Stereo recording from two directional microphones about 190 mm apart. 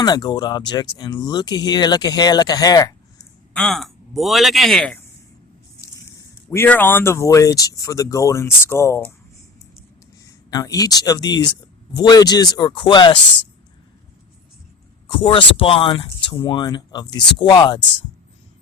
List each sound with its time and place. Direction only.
0.0 s speech: 20° left (ahead or behind)
3.5 s speech: 5° left (ahead or behind)
5.8 s speech: 15° left (ahead or behind)
10.5 s speech: 20° left (ahead or behind)
15.0 s speech: 30° left (ahead or behind)